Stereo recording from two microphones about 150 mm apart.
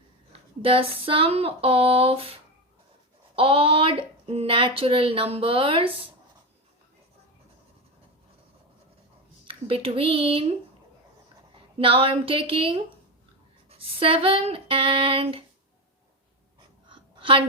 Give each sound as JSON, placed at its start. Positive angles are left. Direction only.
{"t": 0.3, "sound": "speech", "side_deg": -35}
{"t": 3.3, "sound": "speech", "side_deg": -35}
{"t": 9.5, "sound": "speech", "side_deg": -40}
{"t": 11.5, "sound": "a woman's voice", "side_deg": -35}
{"t": 16.9, "sound": "a sound", "side_deg": -35}